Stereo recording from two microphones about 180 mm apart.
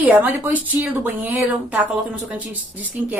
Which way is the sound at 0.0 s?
10° right (ahead or behind).